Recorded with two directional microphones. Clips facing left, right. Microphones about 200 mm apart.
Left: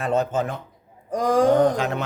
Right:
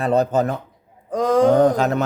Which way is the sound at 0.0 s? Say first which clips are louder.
Right 4 dB; 35° right (ahead or behind).